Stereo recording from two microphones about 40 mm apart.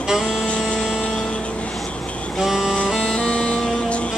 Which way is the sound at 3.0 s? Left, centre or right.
Left.